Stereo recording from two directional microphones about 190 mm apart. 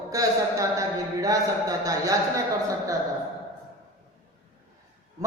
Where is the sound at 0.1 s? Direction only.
15° right (ahead or behind).